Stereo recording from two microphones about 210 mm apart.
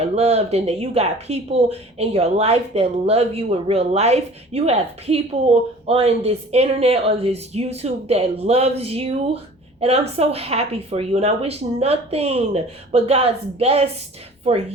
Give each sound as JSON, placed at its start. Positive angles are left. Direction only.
{"t": 0.0, "sound": "speech", "side_deg": -30}